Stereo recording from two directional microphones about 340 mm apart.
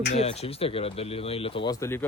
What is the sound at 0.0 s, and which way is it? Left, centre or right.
Speech, centre.